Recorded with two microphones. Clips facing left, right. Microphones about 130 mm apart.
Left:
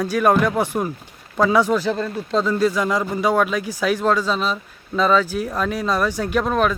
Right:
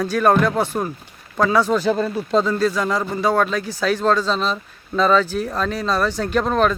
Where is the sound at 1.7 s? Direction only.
Centre (ahead or behind).